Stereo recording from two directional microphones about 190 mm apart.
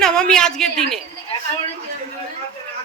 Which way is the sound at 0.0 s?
5° left (ahead or behind).